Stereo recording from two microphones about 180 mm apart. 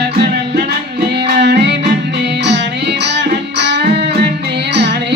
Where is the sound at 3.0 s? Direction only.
70° right (ahead or behind).